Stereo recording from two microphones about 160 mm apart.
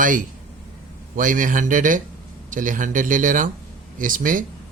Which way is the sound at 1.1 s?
55° right (ahead or behind).